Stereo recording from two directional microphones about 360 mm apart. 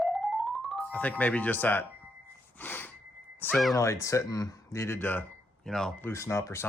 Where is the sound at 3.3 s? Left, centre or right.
Centre.